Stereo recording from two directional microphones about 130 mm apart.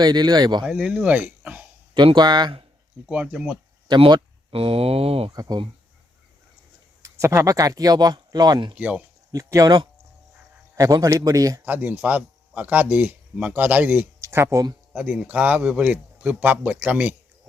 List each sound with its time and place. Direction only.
0.0 s speech: 30° right (ahead or behind)
0.6 s speech: 10° right (ahead or behind)
2.0 s speech: 35° right (ahead or behind)
3.1 s a man's voice: 10° right (ahead or behind)
3.8 s speech: 35° right (ahead or behind)
5.3 s a man's voice: 30° right (ahead or behind)
7.0 s speech: 20° right (ahead or behind)
8.8 s a man's voice: 10° right (ahead or behind)
9.3 s a man's voice: 25° right (ahead or behind)
11.6 s a man's voice: 15° right (ahead or behind)